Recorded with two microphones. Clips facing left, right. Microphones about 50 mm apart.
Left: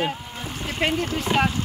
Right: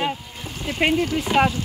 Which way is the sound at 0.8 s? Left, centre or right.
Centre.